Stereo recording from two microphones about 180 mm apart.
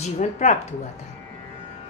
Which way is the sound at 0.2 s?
40° left (ahead or behind).